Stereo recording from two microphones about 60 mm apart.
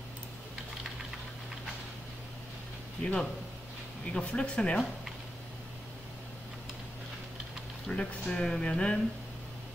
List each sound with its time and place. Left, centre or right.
3.0 s speech: centre
7.8 s speech: centre